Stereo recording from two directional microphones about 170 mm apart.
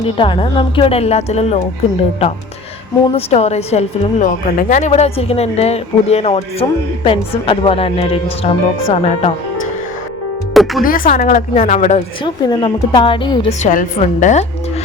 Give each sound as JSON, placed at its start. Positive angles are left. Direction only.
{"t": 0.2, "sound": "a woman's voice", "side_deg": 30}
{"t": 3.2, "sound": "a woman's voice", "side_deg": 35}
{"t": 10.5, "sound": "speech", "side_deg": 0}
{"t": 10.8, "sound": "a woman's voice", "side_deg": 55}
{"t": 12.2, "sound": "a woman's voice", "side_deg": 25}
{"t": 13.5, "sound": "a woman's voice", "side_deg": 45}